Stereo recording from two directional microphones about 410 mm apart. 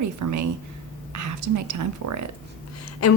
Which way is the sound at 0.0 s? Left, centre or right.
Right.